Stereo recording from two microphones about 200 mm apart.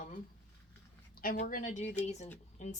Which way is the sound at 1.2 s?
45° left (ahead or behind).